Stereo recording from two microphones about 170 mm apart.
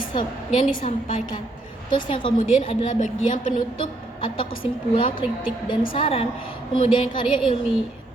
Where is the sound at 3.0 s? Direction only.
50° left (ahead or behind).